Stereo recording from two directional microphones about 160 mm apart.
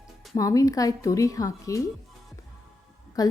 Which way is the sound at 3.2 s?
25° left (ahead or behind).